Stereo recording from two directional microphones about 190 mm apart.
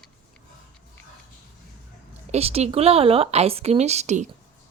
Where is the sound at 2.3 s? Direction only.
30° right (ahead or behind).